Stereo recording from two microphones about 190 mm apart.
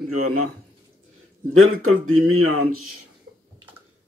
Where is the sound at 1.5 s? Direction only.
90° right.